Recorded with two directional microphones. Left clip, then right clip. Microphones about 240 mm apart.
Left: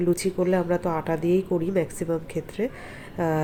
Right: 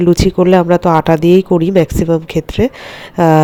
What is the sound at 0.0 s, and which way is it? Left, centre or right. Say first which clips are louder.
A man's voice: right 13 dB; right.